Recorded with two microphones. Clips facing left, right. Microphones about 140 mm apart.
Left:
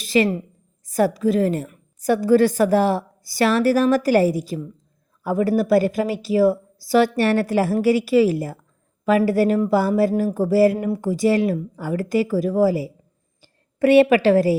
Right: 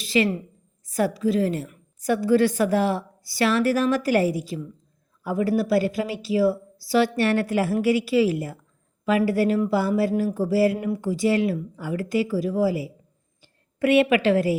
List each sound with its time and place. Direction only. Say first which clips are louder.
0.0 s a woman's voice: left 3 dB; 40° left (ahead or behind)